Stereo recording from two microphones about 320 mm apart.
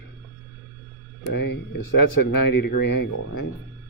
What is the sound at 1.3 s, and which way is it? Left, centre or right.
Speech, left.